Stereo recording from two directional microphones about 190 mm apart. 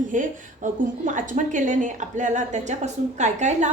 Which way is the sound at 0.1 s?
40° right (ahead or behind).